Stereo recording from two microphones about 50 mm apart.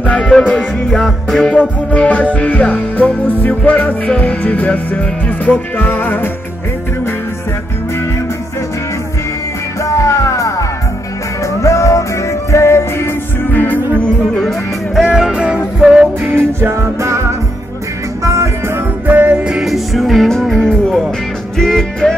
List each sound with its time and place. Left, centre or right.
0.4 s music: left
0.9 s music: centre
1.9 s music: left
9.8 s music: left
13.5 s music: left
13.9 s music: left
15.0 s music: centre
16.3 s music: right
18.2 s music: right
19.0 s music: right
19.3 s music: centre
19.6 s music: centre
20.6 s music: centre